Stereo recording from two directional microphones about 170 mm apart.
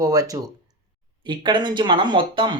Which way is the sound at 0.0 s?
20° right (ahead or behind).